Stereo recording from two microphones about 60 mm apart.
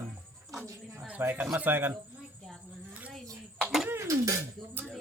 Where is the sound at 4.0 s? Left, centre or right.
Right.